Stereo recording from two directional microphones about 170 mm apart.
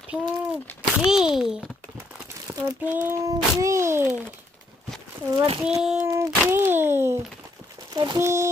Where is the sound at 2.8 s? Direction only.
10° right (ahead or behind).